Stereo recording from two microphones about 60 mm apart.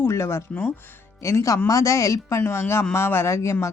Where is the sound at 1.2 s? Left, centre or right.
Left.